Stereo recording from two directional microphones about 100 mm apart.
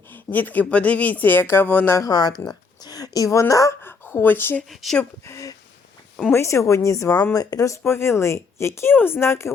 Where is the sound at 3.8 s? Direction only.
25° left (ahead or behind).